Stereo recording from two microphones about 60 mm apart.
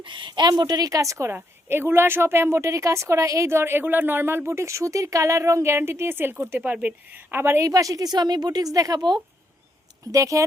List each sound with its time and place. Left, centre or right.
0.5 s a woman's voice: right
1.6 s a woman's voice: right
7.7 s speech: right
10.1 s speech: right